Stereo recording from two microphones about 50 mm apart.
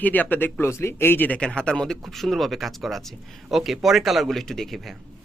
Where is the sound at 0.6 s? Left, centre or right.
Left.